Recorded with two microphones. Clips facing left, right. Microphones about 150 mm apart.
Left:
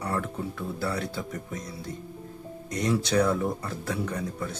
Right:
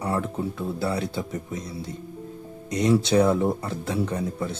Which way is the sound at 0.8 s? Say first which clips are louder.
Right 3 dB; 20° right (ahead or behind).